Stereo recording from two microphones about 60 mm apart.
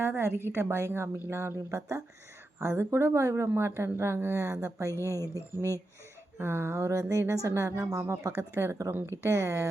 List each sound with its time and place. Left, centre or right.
0.0 s a woman's voice: right
3.5 s a woman's voice: right
4.6 s speech: right
6.4 s a woman's voice: right